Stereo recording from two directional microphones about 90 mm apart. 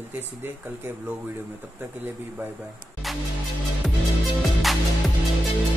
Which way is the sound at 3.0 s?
Centre (ahead or behind).